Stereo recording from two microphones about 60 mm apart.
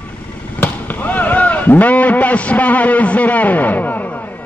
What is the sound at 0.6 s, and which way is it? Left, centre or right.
Basketball bounce, left.